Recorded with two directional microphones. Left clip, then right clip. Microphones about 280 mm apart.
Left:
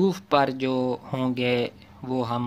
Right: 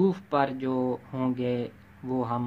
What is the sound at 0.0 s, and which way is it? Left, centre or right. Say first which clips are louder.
A man's voice: left 4 dB; left.